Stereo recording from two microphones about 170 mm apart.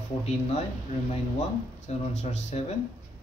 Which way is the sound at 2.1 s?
40° left (ahead or behind).